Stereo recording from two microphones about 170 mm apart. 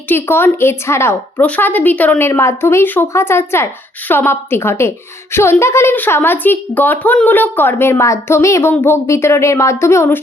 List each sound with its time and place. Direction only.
0.1 s a woman's voice: 15° left (ahead or behind)